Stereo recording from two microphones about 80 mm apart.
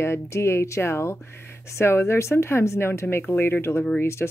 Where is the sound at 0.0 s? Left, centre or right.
Left.